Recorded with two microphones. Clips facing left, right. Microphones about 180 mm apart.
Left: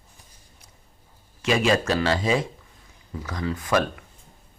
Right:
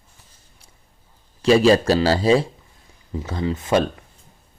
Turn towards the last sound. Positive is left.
turn(degrees=-30)  # may be behind; listen again after turning